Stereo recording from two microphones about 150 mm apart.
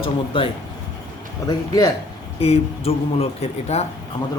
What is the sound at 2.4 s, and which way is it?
A man's voice, 40° left (ahead or behind).